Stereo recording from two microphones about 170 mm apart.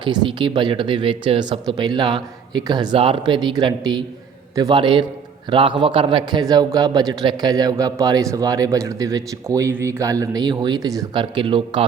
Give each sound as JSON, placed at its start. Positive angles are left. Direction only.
{"t": 0.0, "sound": "a man's voice", "side_deg": -30}